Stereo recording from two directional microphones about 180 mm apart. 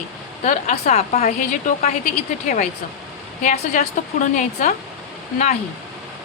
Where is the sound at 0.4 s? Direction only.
40° left (ahead or behind).